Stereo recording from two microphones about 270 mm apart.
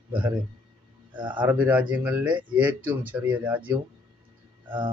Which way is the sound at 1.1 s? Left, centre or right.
Centre.